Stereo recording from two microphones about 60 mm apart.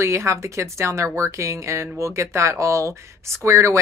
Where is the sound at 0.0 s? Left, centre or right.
Right.